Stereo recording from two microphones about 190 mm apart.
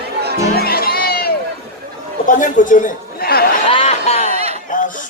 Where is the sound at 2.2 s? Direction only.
45° left (ahead or behind).